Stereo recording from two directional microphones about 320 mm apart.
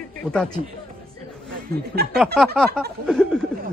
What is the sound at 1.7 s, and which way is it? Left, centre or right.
Speech, right.